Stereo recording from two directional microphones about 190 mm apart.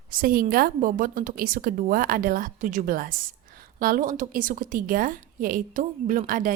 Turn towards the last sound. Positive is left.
turn(degrees=-45)  # may be behind; listen again after turning